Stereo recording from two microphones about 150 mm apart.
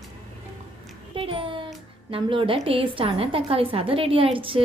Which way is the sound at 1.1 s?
35° right (ahead or behind).